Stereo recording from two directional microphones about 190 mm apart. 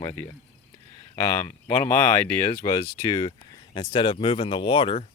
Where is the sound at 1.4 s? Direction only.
10° left (ahead or behind).